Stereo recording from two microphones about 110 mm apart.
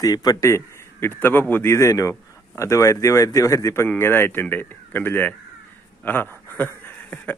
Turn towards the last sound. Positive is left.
turn(degrees=15)  # may be behind; listen again after turning